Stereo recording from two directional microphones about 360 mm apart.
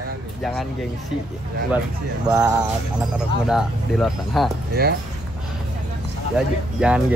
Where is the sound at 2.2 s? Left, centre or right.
Centre.